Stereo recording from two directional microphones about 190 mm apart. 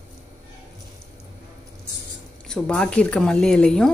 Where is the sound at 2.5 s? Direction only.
5° left (ahead or behind).